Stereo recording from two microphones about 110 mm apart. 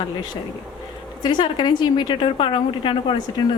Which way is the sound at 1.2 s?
45° left (ahead or behind).